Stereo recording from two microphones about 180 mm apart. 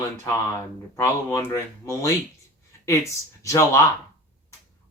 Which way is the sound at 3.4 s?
15° left (ahead or behind).